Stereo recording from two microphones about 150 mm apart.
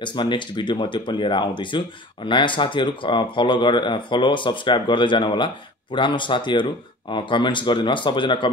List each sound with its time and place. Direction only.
0.0 s speech: 30° left (ahead or behind)